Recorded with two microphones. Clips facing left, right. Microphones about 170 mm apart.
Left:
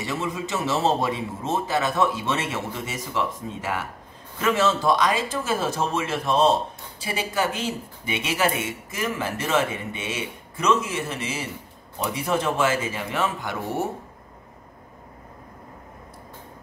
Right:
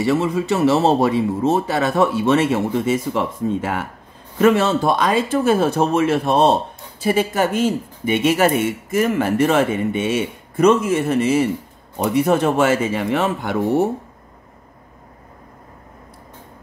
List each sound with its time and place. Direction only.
0.0 s speech: 65° right (ahead or behind)